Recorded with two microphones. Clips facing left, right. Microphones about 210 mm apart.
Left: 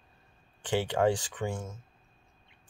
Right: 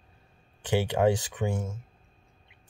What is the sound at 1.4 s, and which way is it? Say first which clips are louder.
Speech: right 4 dB; 25° right (ahead or behind).